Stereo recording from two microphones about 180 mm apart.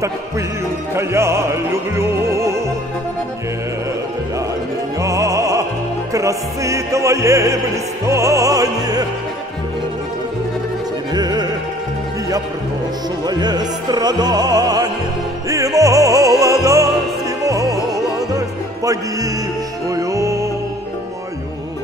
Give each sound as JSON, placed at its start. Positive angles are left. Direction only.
{"t": 0.9, "sound": "opera", "side_deg": -15}
{"t": 5.0, "sound": "music", "side_deg": -20}
{"t": 6.1, "sound": "opera", "side_deg": -15}
{"t": 11.1, "sound": "music", "side_deg": -20}
{"t": 13.3, "sound": "music", "side_deg": -20}